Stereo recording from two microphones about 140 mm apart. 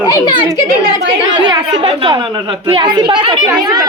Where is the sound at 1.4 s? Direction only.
35° right (ahead or behind).